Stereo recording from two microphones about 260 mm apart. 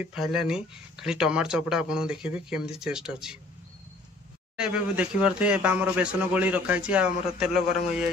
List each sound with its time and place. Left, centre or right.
0.0 s speech: centre
4.6 s speech: centre